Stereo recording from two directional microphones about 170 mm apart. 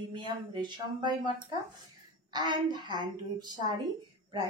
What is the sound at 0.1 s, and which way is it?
A woman's voice, 30° right (ahead or behind).